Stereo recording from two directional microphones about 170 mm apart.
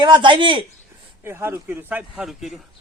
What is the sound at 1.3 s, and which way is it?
Speech, 15° right (ahead or behind).